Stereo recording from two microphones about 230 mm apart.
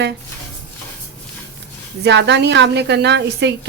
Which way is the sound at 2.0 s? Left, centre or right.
Right.